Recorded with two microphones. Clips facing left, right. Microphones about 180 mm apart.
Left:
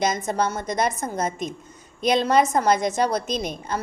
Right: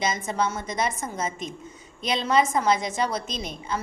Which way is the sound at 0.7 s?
40° left (ahead or behind).